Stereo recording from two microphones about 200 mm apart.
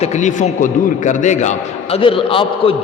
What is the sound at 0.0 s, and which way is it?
A man's voice, 35° left (ahead or behind).